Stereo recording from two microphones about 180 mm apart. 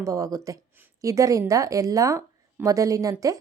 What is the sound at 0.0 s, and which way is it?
A woman's voice, 20° right (ahead or behind).